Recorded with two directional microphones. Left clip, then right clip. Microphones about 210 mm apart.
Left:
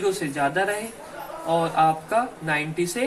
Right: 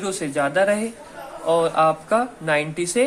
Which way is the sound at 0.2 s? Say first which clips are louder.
Right 4 dB; 35° right (ahead or behind).